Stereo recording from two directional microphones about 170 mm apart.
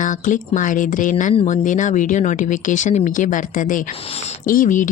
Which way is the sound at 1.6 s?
45° left (ahead or behind).